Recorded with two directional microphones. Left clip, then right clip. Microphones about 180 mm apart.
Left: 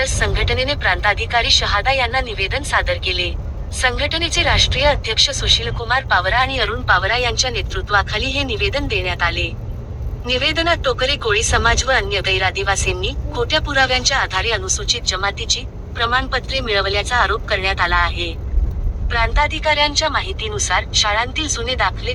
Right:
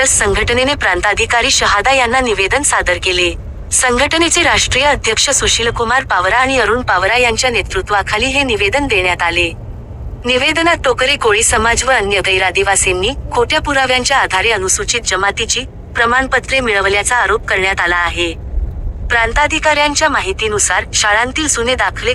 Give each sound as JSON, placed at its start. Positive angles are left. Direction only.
{"t": 0.0, "sound": "speech", "side_deg": -40}